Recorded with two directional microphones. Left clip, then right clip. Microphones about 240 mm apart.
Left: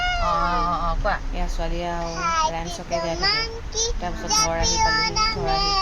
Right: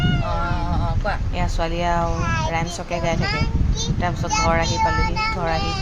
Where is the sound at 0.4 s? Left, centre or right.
Right.